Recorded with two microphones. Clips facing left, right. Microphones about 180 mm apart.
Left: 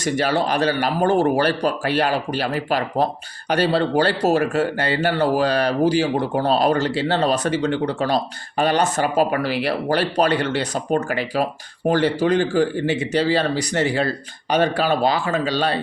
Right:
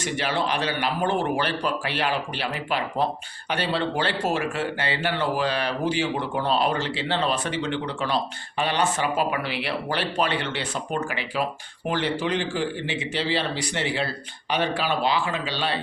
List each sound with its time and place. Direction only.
0.0 s speech: 40° left (ahead or behind)